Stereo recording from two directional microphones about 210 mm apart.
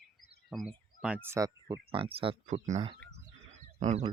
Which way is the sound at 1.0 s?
10° right (ahead or behind).